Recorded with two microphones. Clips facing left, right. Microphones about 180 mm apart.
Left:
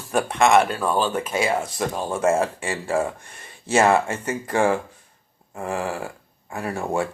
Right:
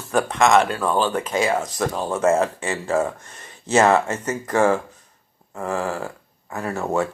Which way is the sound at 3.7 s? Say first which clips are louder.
Right 1 dB; 15° left (ahead or behind).